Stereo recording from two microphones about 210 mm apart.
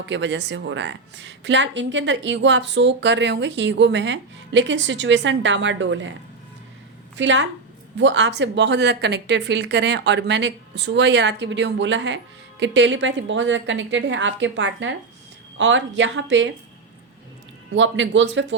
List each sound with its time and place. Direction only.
0.0 s speech: 60° right (ahead or behind)
7.2 s speech: 60° right (ahead or behind)
17.7 s speech: 60° right (ahead or behind)